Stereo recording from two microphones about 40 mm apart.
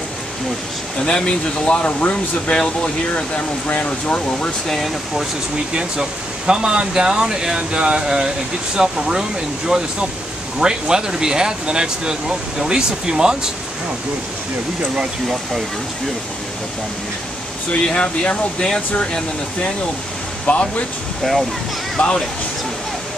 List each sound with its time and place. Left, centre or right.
1.0 s speech: left
2.5 s speech: left
4.6 s speech: centre
5.8 s speech: right
10.6 s speech: centre
17.7 s speech: left
20.4 s speech: left
21.2 s speech: centre
22.0 s speech: left